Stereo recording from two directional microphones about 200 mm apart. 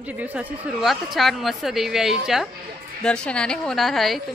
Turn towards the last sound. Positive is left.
turn(degrees=0)  # may be behind; listen again after turning